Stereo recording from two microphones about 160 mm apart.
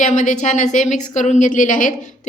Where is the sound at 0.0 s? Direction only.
50° left (ahead or behind).